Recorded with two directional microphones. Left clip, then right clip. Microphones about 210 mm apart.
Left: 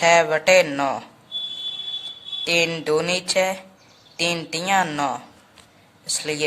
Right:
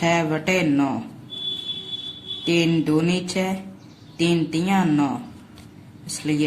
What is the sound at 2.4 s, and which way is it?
A man's voice, 25° left (ahead or behind).